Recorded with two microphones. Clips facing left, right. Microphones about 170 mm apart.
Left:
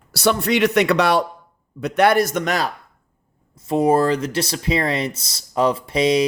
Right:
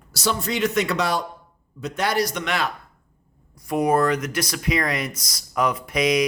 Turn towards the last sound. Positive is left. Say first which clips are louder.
# left 3 dB
turn(degrees=30)  # may be behind; listen again after turning